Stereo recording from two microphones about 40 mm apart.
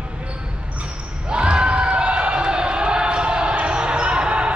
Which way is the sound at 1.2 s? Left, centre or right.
Right.